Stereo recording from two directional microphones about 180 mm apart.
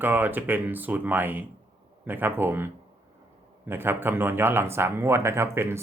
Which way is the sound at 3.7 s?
10° right (ahead or behind).